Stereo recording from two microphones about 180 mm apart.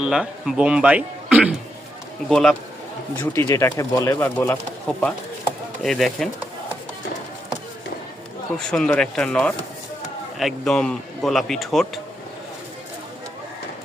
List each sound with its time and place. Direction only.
0.0 s a man's voice: 5° right (ahead or behind)
3.2 s a man's voice: 15° left (ahead or behind); by 6.3 s centre (ahead or behind)
8.5 s a man's voice: 5° left (ahead or behind)